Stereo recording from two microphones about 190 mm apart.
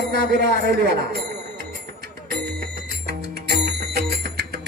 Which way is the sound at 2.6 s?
60° right (ahead or behind).